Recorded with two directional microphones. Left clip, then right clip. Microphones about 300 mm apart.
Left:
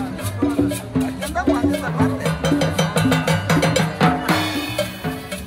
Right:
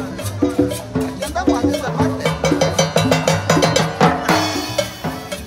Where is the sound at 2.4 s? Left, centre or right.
Centre.